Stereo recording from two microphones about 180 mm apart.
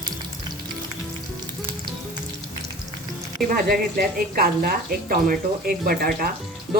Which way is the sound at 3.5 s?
55° right (ahead or behind).